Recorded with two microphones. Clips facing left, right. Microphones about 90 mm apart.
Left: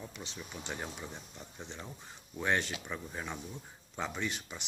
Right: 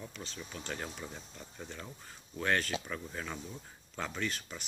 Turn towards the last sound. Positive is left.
turn(degrees=15)  # may be behind; listen again after turning